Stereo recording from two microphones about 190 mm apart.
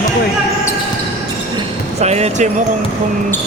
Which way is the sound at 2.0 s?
35° right (ahead or behind).